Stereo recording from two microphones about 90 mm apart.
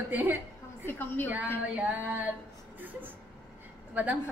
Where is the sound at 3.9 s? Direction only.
15° right (ahead or behind).